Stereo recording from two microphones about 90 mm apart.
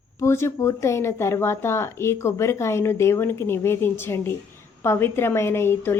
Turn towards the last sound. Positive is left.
turn(degrees=25)  # may be behind; listen again after turning